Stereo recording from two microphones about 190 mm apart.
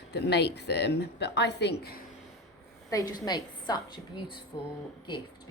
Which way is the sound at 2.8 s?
20° left (ahead or behind).